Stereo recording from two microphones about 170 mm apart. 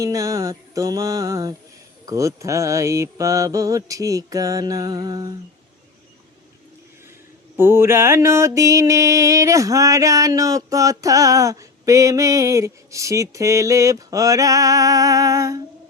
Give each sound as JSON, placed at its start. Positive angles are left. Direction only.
{"t": 0.0, "sound": "mantra", "side_deg": -20}
{"t": 7.5, "sound": "mantra", "side_deg": -15}